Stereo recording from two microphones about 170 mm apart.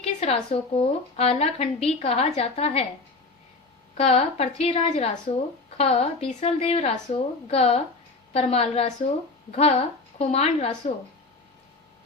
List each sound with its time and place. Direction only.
0.0 s a woman's voice: 35° left (ahead or behind)
3.9 s a woman's voice: 35° left (ahead or behind)